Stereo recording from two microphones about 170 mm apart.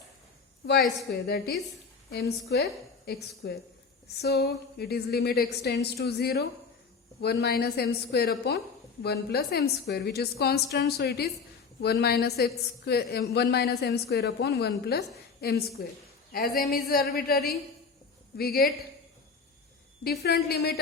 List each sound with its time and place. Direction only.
0.7 s a woman's voice: 70° left (ahead or behind)
20.1 s a woman's voice: 65° left (ahead or behind)